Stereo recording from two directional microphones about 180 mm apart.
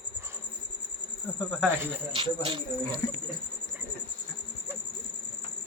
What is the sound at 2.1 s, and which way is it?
Speech, 30° right (ahead or behind).